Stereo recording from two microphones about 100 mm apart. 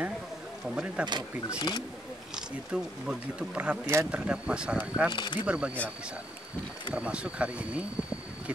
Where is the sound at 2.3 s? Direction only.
10° right (ahead or behind).